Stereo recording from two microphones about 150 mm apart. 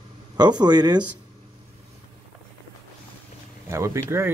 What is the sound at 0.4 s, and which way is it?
Speech, 25° right (ahead or behind).